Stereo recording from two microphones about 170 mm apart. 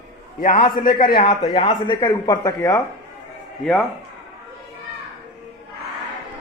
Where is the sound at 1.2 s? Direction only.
30° left (ahead or behind).